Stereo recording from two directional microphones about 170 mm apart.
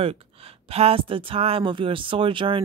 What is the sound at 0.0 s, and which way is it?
Speech, 35° right (ahead or behind).